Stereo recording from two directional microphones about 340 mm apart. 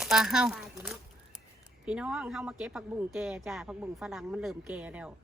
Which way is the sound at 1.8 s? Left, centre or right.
Centre.